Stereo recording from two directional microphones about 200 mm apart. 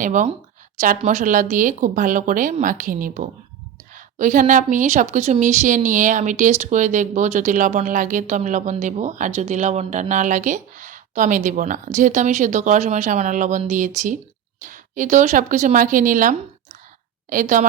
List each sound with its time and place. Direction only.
0.0 s a woman's voice: 40° right (ahead or behind)